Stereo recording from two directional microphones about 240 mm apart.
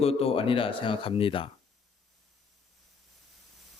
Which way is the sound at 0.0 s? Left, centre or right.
Left.